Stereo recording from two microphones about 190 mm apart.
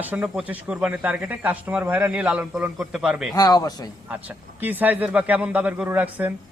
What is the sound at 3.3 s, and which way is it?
Speech, 20° left (ahead or behind).